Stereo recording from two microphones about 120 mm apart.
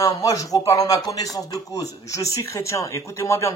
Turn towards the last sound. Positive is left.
turn(degrees=25)  # may be behind; listen again after turning